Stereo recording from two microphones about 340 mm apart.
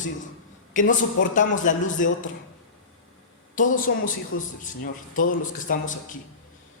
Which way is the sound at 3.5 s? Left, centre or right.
Left.